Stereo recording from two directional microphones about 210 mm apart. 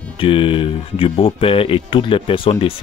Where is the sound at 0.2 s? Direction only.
25° left (ahead or behind).